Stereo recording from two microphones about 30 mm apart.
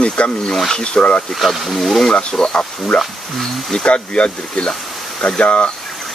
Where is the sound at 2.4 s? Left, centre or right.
Left.